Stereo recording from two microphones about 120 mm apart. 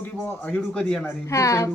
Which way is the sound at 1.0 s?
25° left (ahead or behind).